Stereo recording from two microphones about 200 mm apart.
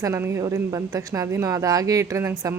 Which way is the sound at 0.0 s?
15° right (ahead or behind).